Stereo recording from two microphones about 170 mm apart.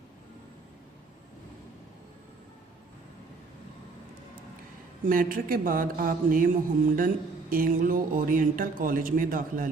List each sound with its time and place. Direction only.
5.0 s speech: 55° right (ahead or behind)